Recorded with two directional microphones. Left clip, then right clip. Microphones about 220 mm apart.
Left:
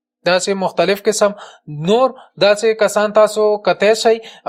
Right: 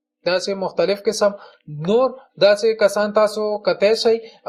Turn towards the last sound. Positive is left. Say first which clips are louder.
# left 3 dB
turn(degrees=45)  # may be behind; listen again after turning